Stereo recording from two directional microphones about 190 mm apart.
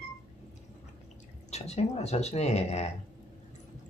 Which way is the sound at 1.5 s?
35° left (ahead or behind).